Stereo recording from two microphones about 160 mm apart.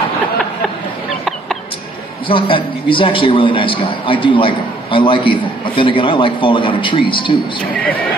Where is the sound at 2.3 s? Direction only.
30° left (ahead or behind).